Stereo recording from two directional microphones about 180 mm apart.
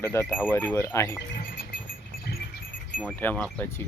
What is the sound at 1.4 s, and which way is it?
Rodents, 55° left (ahead or behind).